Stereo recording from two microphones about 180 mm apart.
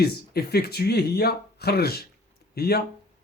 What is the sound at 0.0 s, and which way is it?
Speech, 60° left (ahead or behind).